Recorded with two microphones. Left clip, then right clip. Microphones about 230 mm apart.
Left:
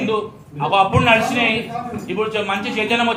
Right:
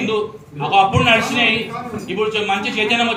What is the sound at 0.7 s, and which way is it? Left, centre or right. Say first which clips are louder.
A man's voice: right 1 dB; centre.